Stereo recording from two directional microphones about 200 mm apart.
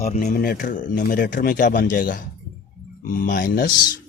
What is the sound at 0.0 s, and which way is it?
Speech, 40° left (ahead or behind).